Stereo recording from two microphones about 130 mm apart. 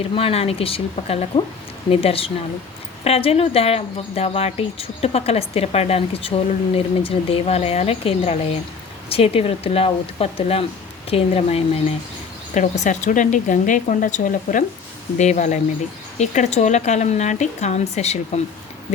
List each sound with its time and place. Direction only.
0.2 s speech: 50° left (ahead or behind)
12.5 s speech: 65° left (ahead or behind); by 14.6 s 90° left
15.2 s speech: 65° left (ahead or behind)